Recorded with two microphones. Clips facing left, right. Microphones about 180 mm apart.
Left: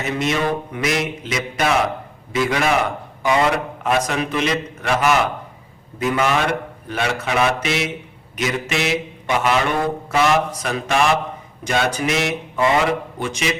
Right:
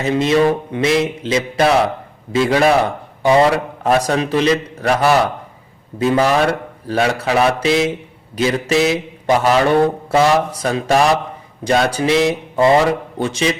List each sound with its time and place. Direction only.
0.0 s a man's voice: 30° right (ahead or behind)